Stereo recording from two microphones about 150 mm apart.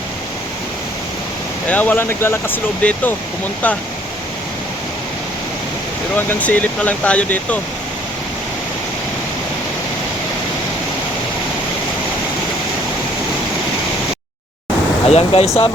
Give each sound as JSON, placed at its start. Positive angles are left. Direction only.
{"t": 1.7, "sound": "speech", "side_deg": 10}
{"t": 6.1, "sound": "speech", "side_deg": 10}
{"t": 15.0, "sound": "speech", "side_deg": 40}
{"t": 15.4, "sound": "speech", "side_deg": 15}